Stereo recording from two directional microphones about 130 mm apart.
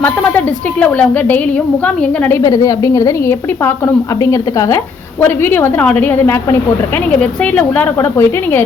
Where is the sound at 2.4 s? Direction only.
25° left (ahead or behind).